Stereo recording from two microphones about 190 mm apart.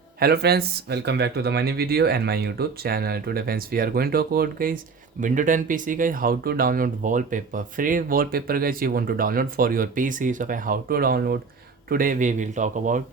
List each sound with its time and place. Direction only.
0.2 s speech: 55° right (ahead or behind)